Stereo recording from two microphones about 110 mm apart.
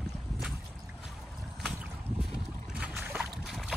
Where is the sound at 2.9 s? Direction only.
20° right (ahead or behind).